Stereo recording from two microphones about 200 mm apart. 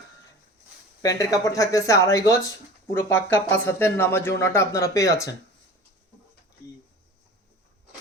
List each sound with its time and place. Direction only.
1.0 s speech: 15° left (ahead or behind)